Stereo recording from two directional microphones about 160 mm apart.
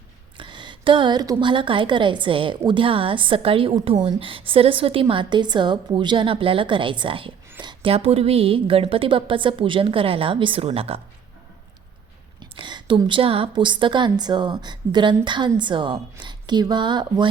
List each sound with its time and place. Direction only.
0.3 s a woman's voice: 30° right (ahead or behind)
12.4 s a woman's voice: 30° right (ahead or behind)